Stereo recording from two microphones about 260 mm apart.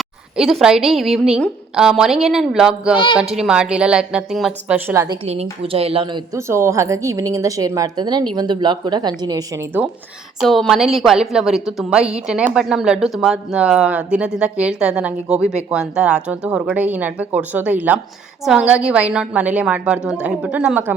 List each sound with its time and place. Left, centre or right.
0.3 s speech: centre
5.2 s a woman's voice: right; by 20.9 s centre